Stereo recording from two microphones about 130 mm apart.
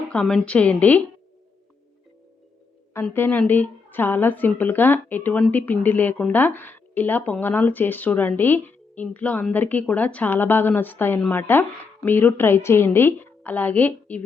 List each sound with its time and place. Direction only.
0.1 s a woman's voice: 5° left (ahead or behind)
2.9 s a woman's voice: 15° left (ahead or behind)